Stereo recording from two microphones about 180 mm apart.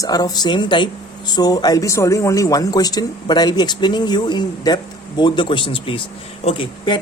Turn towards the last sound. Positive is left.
turn(degrees=30)  # may be behind; listen again after turning